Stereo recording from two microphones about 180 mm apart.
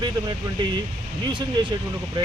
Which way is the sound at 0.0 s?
25° right (ahead or behind).